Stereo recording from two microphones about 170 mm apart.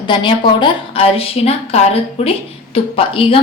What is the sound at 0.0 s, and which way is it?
A woman's voice, 30° left (ahead or behind).